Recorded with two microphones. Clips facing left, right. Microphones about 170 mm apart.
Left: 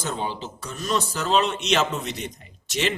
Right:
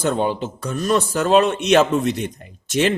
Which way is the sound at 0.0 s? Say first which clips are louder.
Right 9 dB; 60° right (ahead or behind).